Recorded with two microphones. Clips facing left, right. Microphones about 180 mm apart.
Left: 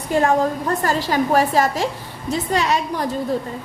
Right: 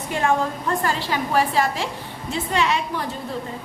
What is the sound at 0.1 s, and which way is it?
A woman's voice, 40° left (ahead or behind).